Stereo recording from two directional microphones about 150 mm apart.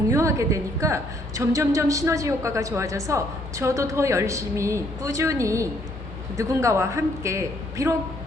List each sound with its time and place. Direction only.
0.1 s a woman's voice: 20° right (ahead or behind)